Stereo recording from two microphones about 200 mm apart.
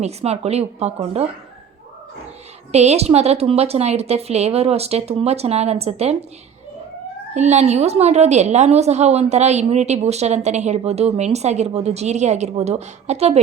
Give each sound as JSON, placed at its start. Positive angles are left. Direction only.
{"t": 0.0, "sound": "a woman's voice", "side_deg": -30}
{"t": 2.7, "sound": "a woman's voice", "side_deg": -30}
{"t": 7.3, "sound": "a woman's voice", "side_deg": -35}